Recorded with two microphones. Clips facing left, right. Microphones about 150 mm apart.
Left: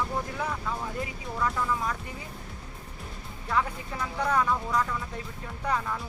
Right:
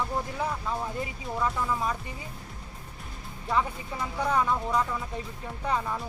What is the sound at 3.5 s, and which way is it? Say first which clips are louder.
Speech: right 1 dB; 15° right (ahead or behind).